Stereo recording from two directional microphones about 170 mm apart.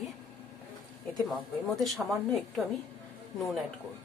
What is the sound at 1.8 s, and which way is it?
Speech, centre (ahead or behind).